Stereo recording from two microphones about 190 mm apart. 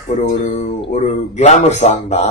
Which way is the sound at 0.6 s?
35° left (ahead or behind).